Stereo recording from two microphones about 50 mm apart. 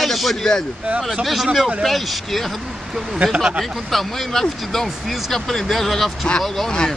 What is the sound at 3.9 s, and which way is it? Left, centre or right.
Speech, centre.